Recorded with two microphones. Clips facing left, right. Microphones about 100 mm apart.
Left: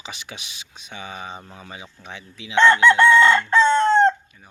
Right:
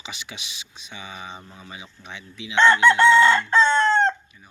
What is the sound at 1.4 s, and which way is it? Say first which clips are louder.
Chicken: left 2 dB; 40° left (ahead or behind).